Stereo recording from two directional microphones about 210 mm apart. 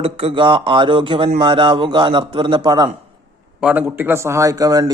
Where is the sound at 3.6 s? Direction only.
5° right (ahead or behind).